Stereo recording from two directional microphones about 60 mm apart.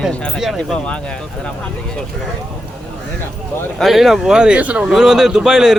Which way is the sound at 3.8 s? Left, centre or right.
Centre.